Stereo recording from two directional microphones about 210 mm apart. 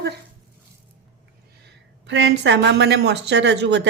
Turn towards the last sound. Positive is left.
turn(degrees=-55)  # may be behind; listen again after turning